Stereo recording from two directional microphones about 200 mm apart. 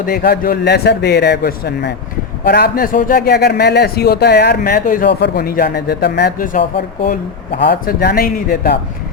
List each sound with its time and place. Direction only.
0.0 s a man's voice: 50° left (ahead or behind)
7.6 s a man's voice: 50° left (ahead or behind)